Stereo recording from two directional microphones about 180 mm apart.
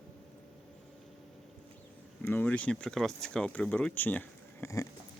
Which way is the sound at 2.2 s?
10° left (ahead or behind).